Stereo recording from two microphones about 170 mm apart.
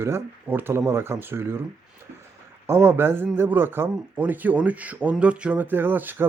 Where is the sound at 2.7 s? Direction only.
15° right (ahead or behind).